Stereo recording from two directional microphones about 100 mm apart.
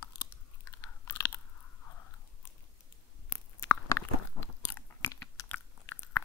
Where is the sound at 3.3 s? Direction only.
20° left (ahead or behind).